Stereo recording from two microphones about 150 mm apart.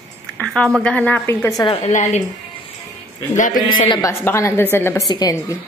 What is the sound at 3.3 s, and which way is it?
Speech, 60° left (ahead or behind).